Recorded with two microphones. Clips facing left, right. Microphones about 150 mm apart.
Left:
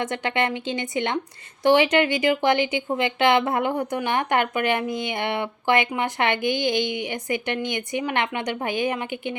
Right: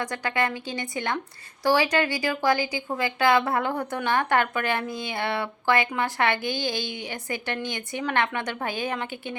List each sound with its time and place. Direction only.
0.0 s speech: 25° left (ahead or behind)